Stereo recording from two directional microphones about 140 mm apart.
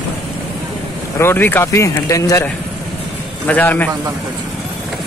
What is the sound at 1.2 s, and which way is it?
Speech, 15° left (ahead or behind).